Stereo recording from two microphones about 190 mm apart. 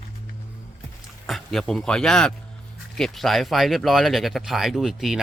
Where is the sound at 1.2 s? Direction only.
Centre (ahead or behind).